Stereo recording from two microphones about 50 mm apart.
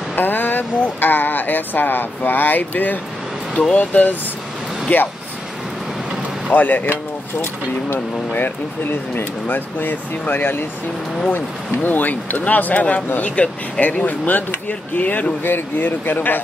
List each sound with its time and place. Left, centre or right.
0.1 s speech: left
6.5 s speech: left
8.3 s speech: left